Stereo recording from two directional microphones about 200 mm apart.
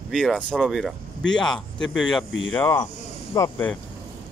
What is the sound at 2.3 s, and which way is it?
Mantra, 70° left (ahead or behind).